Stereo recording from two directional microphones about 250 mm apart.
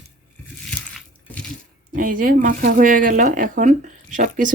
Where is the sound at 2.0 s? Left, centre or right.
Right.